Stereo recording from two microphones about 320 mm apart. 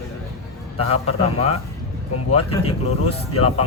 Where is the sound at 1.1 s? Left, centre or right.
Centre.